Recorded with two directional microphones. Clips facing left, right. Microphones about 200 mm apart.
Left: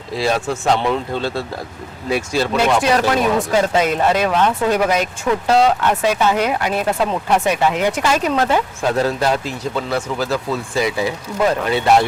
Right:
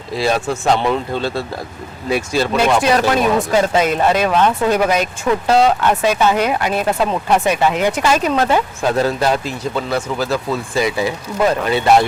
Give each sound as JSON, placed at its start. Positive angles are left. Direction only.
{"t": 0.1, "sound": "speech", "side_deg": -5}
{"t": 8.4, "sound": "speech", "side_deg": -20}
{"t": 9.0, "sound": "speech", "side_deg": -5}